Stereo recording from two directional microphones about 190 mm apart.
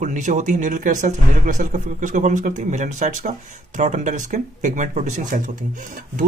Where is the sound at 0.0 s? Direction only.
40° right (ahead or behind).